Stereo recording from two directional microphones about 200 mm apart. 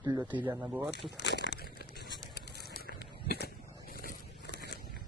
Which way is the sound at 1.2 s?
60° left (ahead or behind).